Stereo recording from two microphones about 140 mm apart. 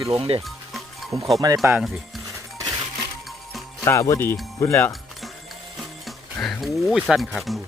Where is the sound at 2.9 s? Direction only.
Centre (ahead or behind).